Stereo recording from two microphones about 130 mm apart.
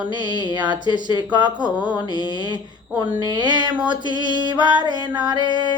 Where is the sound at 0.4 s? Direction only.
35° right (ahead or behind).